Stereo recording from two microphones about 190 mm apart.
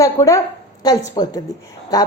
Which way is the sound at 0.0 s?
15° left (ahead or behind).